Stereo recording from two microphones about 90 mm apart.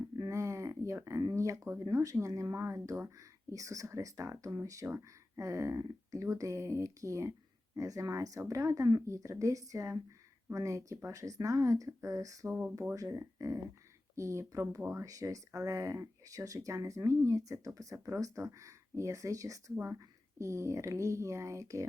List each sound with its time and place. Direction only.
0.2 s a sound: 35° right (ahead or behind)
1.4 s speech: 35° right (ahead or behind)
12.5 s speech: 20° right (ahead or behind)
12.9 s speech: 35° right (ahead or behind)
19.7 s speech: 25° right (ahead or behind)